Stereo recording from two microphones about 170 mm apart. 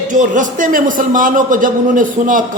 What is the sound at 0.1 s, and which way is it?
A man's voice, 50° right (ahead or behind).